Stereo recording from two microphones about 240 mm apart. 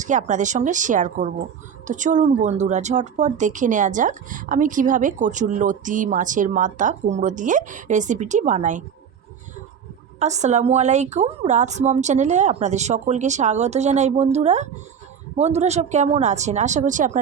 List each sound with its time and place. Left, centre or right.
0.0 s speech: right
10.2 s a woman's voice: right